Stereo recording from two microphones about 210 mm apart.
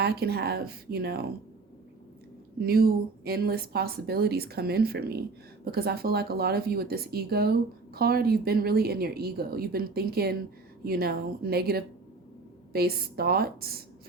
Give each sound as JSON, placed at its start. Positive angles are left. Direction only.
{"t": 0.0, "sound": "speech", "side_deg": -50}
{"t": 2.6, "sound": "speech", "side_deg": -45}